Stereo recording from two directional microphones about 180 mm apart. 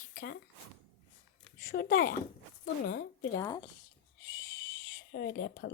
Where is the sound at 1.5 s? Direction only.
60° left (ahead or behind).